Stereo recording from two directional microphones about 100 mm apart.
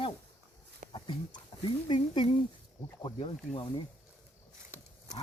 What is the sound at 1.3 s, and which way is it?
Speech, 55° left (ahead or behind).